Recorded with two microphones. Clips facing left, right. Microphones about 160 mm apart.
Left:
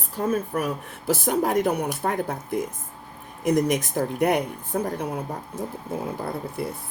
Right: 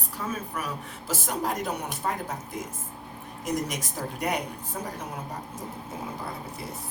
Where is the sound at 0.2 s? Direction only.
55° left (ahead or behind).